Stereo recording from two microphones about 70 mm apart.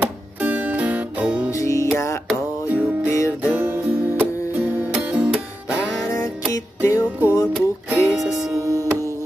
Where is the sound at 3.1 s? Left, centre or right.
Left.